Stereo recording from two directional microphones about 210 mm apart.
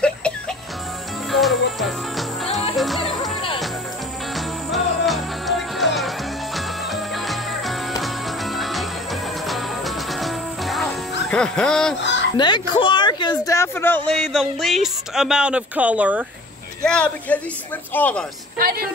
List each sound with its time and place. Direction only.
0.0 s music: 5° left (ahead or behind)
3.0 s music: 25° left (ahead or behind)
4.4 s music: centre (ahead or behind)
12.0 s fowl: 60° left (ahead or behind)
12.4 s speech: 20° left (ahead or behind); by 16.3 s 5° right (ahead or behind)
16.8 s speech: 5° left (ahead or behind)